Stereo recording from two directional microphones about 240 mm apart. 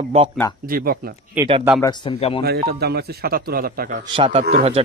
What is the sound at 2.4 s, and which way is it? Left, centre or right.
A man's voice, right.